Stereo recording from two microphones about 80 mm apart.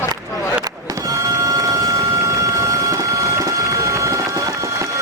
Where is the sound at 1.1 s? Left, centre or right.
Right.